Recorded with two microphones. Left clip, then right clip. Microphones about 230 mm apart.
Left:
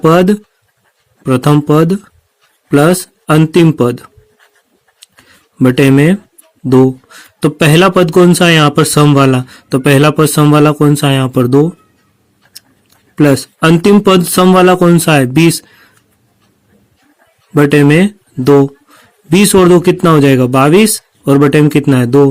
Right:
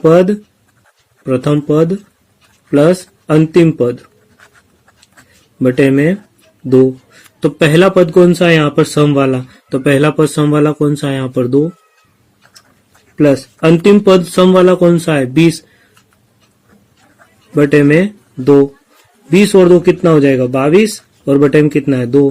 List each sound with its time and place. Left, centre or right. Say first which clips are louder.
0.0 s a man's voice: even; left
5.5 s a man's voice: left 2 dB; left
13.1 s a man's voice: left 1 dB; left
17.5 s a man's voice: left 1 dB; left